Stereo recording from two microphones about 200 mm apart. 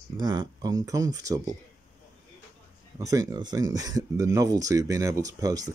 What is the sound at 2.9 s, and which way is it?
Speech, 15° right (ahead or behind).